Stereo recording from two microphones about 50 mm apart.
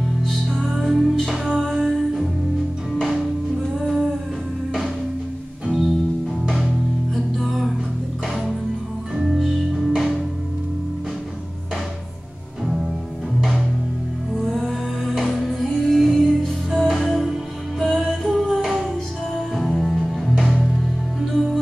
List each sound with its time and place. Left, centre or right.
0.7 s music: centre
3.8 s music: centre
6.4 s music: centre
9.3 s music: centre
14.4 s music: centre
16.1 s music: centre